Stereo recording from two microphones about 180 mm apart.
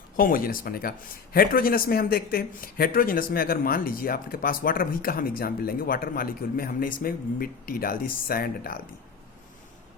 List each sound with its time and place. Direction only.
0.2 s a man's voice: 50° left (ahead or behind)